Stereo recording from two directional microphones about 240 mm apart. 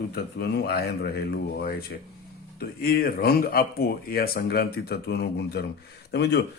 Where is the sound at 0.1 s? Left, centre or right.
Left.